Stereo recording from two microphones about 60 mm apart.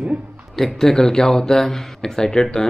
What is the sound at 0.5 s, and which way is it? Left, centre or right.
Speech, centre.